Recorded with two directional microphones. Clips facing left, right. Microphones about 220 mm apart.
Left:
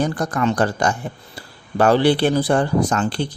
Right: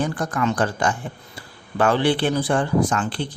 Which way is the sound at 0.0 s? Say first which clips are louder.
Left 3 dB; 40° left (ahead or behind).